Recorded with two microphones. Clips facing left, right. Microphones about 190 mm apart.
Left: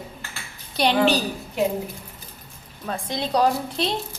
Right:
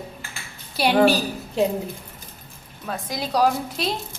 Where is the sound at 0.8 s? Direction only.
5° right (ahead or behind).